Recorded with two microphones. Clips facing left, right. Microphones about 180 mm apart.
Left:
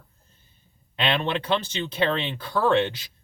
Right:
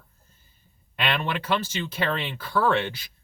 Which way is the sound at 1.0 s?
25° left (ahead or behind).